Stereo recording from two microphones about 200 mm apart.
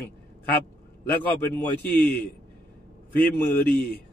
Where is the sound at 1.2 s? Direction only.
10° left (ahead or behind).